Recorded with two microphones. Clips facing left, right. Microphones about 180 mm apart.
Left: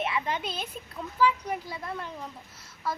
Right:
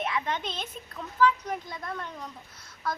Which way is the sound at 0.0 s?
5° left (ahead or behind).